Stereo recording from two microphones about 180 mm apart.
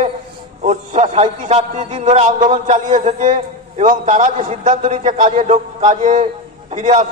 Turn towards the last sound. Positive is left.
turn(degrees=-45)  # may be behind; listen again after turning